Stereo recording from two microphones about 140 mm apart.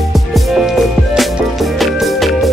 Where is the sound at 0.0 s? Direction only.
Centre (ahead or behind).